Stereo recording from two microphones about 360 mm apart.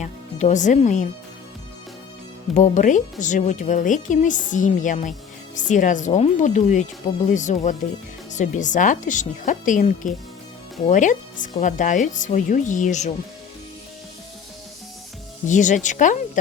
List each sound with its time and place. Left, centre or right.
0.0 s speech: centre
2.6 s speech: centre
15.4 s speech: centre